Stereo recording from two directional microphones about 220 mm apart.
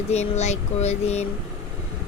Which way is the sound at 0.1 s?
30° left (ahead or behind).